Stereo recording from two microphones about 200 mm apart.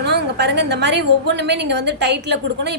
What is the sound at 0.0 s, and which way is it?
A woman's voice, 55° right (ahead or behind).